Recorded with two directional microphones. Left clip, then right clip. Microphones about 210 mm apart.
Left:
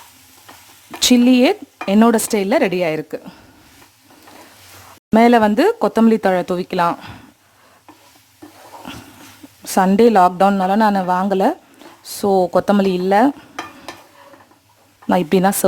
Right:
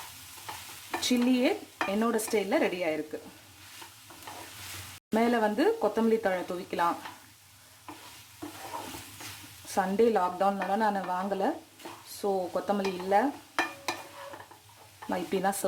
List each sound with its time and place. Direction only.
1.0 s speech: 50° left (ahead or behind)
5.1 s speech: 45° left (ahead or behind)
9.7 s speech: 50° left (ahead or behind)
15.1 s speech: 45° left (ahead or behind)